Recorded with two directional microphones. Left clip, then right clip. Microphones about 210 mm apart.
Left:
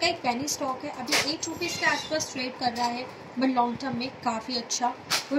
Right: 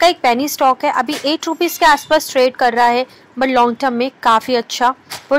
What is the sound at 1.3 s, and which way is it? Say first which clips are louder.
A woman's voice: right 13 dB; 20° right (ahead or behind).